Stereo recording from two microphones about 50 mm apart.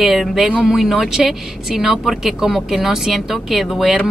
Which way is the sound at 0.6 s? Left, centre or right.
Centre.